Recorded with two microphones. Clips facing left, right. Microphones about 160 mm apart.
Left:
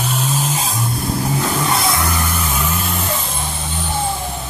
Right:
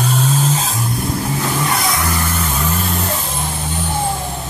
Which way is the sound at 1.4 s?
20° left (ahead or behind).